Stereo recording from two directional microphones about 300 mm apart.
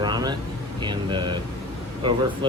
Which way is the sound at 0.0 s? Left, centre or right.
Centre.